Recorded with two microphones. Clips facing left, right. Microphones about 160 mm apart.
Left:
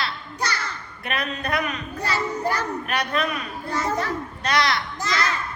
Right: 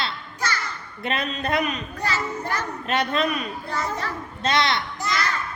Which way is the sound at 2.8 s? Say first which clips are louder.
Right 6 dB; 25° right (ahead or behind).